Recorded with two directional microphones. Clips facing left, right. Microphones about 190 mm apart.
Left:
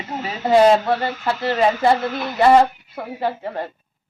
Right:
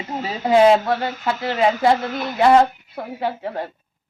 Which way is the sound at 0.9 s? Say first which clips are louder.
Left 1 dB; 5° left (ahead or behind).